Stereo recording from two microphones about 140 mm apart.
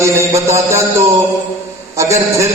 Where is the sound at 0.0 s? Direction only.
20° right (ahead or behind).